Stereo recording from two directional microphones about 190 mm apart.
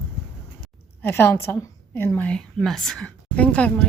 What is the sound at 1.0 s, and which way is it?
A woman's voice, 10° left (ahead or behind).